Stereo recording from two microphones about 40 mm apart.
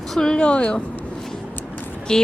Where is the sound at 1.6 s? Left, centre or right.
Left.